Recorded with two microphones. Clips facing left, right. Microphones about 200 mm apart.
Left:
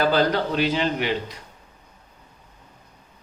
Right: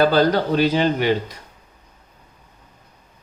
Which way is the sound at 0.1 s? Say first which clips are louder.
Right 4 dB; 40° right (ahead or behind).